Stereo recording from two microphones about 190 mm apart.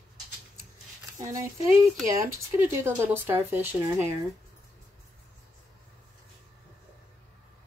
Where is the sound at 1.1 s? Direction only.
15° right (ahead or behind).